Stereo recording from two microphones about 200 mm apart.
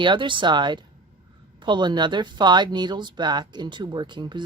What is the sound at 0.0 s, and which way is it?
Speech, 25° right (ahead or behind).